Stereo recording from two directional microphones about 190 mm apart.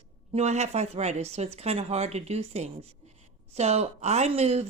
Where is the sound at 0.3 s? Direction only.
35° right (ahead or behind).